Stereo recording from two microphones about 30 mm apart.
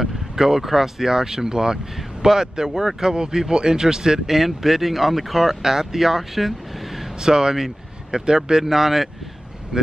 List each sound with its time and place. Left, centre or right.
0.0 s speech: centre
4.3 s speech: centre
5.6 s speech: centre
7.2 s speech: right